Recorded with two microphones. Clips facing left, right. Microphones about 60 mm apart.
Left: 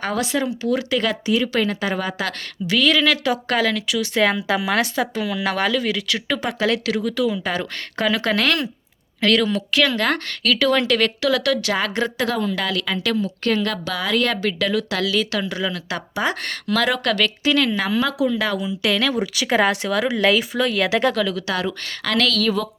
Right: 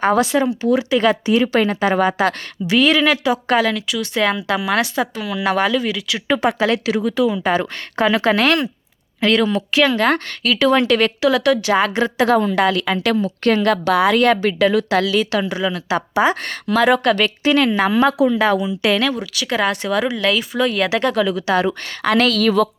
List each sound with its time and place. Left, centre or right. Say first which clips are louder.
0.0 s speech: right 7 dB; right
1.0 s a woman's voice: right 5 dB; right
3.2 s speech: right 3 dB; centre
3.8 s speech: even; centre
6.6 s speech: right 3 dB; centre
12.2 s a woman's voice: right 11 dB; right
14.1 s speech: right 6 dB; right
19.2 s speech: left 1 dB; centre
20.5 s speech: right 2 dB; centre
21.2 s speech: right 5 dB; centre
22.3 s a woman's voice: right 5 dB; right